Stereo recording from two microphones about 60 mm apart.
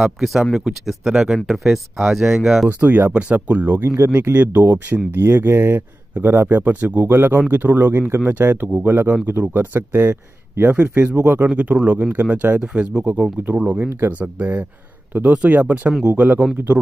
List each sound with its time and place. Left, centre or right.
0.2 s speech: centre
2.8 s speech: right
3.1 s speech: right
10.7 s speech: right
13.7 s speech: right